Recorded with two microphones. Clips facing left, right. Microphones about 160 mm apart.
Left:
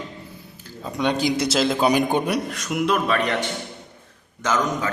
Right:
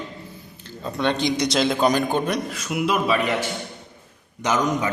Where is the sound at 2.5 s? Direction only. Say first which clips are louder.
Left 1 dB; centre (ahead or behind).